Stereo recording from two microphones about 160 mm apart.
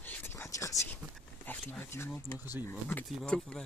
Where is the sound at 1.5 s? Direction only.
10° left (ahead or behind).